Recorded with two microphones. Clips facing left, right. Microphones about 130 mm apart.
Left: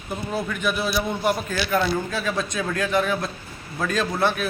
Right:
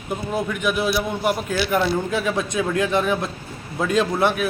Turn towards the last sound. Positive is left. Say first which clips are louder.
# right 4 dB
turn(degrees=-15)  # may be behind; listen again after turning